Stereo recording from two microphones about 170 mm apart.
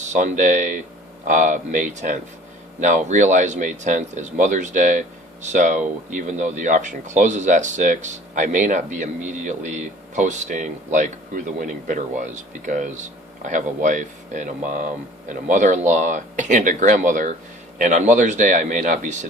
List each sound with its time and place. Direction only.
0.0 s speech: 45° right (ahead or behind)